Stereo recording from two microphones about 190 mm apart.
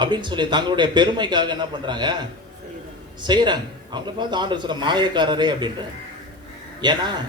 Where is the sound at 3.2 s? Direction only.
25° right (ahead or behind).